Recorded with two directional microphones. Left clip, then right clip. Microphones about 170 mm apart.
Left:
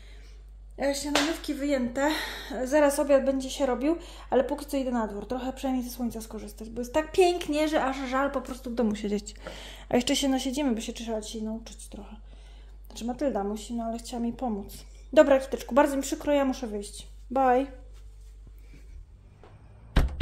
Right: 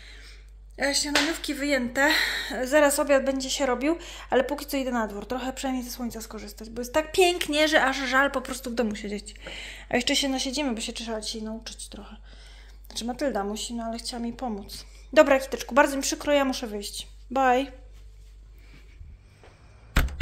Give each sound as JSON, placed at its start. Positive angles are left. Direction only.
{"t": 0.0, "sound": "speech", "side_deg": 5}
{"t": 8.8, "sound": "a woman's voice", "side_deg": 25}